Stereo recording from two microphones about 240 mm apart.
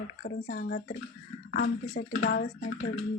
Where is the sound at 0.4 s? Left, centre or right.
Left.